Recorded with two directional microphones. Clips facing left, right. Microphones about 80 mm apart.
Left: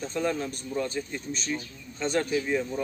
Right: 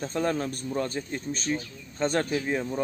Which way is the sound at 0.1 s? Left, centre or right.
Right.